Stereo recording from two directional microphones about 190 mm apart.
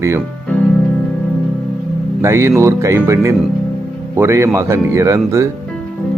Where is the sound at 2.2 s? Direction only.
15° right (ahead or behind).